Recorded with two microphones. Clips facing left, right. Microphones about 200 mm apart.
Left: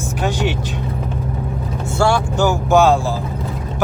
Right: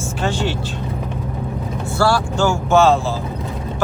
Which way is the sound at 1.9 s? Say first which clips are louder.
Left 1 dB; 20° left (ahead or behind).